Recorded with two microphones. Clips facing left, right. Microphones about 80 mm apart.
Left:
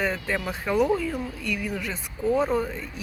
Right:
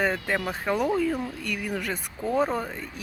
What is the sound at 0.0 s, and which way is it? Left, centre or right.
Speech, right.